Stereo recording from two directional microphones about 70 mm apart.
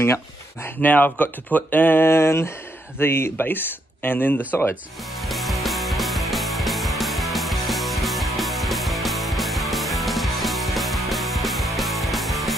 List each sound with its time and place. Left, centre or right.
0.7 s speech: left
5.2 s music: centre